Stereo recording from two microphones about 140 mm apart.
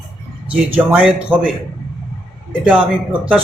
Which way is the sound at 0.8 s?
10° right (ahead or behind).